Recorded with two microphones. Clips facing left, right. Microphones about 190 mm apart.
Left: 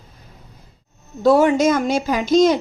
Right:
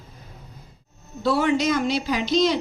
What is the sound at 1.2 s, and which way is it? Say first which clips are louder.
A woman's voice: left 7 dB; 45° left (ahead or behind).